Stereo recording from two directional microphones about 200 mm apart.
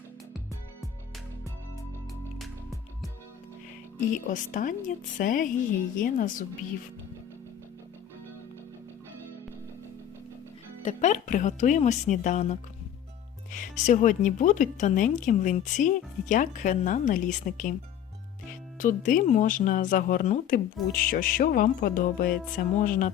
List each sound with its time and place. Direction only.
2.4 s music: centre (ahead or behind)
4.1 s speech: 40° left (ahead or behind)
10.8 s speech: 35° left (ahead or behind)
18.8 s speech: 40° left (ahead or behind)
20.9 s music: 45° left (ahead or behind)